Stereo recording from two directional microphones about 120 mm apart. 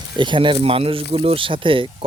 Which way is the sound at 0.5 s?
55° right (ahead or behind).